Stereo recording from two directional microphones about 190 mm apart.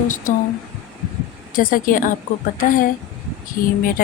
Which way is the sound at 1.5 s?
45° left (ahead or behind).